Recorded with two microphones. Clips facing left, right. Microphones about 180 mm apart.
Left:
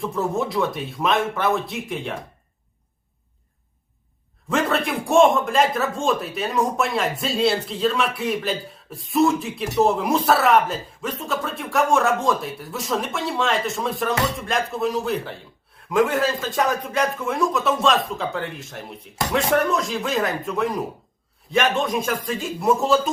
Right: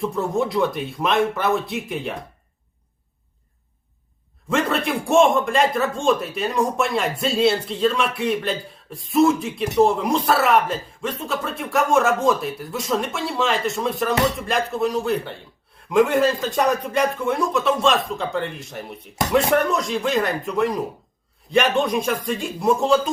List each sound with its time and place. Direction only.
0.0 s speech: centre (ahead or behind)
4.4 s speech: centre (ahead or behind)